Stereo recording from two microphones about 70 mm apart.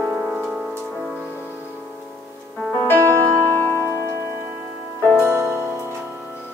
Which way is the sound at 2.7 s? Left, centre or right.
Left.